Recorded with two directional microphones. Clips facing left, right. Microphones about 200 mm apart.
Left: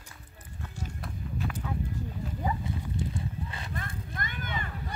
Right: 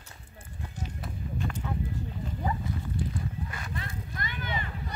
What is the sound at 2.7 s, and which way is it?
Horse, 30° left (ahead or behind).